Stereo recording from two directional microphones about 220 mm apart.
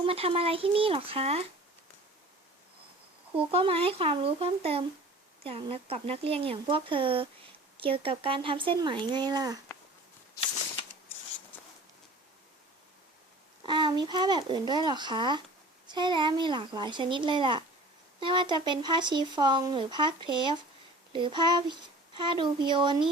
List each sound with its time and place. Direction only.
0.0 s speech: 25° right (ahead or behind)
3.3 s speech: 25° right (ahead or behind)
13.6 s speech: 20° right (ahead or behind)